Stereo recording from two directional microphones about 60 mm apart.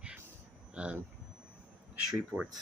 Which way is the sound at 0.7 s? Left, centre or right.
Centre.